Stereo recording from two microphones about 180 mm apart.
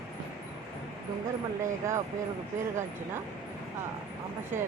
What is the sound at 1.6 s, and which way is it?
Speech, 15° right (ahead or behind).